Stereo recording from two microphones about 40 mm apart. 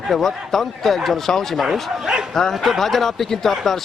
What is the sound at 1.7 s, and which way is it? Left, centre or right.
Speech, centre.